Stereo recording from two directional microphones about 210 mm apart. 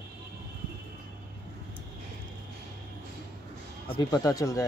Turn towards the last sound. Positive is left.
turn(degrees=15)  # may be behind; listen again after turning